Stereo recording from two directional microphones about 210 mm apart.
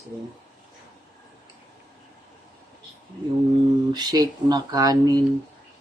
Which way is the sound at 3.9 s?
20° right (ahead or behind).